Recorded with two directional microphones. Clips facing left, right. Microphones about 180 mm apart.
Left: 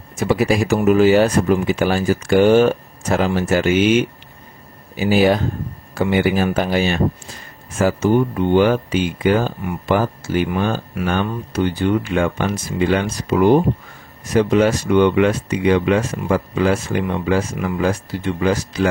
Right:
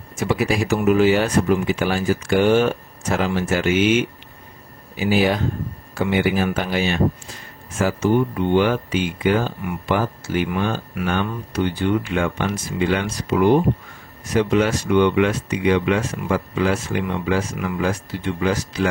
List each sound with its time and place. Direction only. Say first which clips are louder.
0.2 s speech: left 4 dB; 40° left (ahead or behind)
4.9 s speech: left 4 dB; 40° left (ahead or behind)